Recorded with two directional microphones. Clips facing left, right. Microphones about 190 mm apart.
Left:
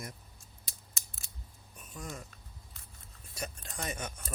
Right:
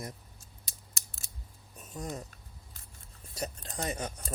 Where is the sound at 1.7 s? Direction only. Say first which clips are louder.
Right 4 dB; 25° right (ahead or behind).